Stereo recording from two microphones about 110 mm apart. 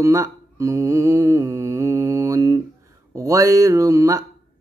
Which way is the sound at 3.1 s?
30° right (ahead or behind).